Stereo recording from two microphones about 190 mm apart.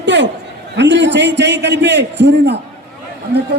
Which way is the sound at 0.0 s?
70° right (ahead or behind).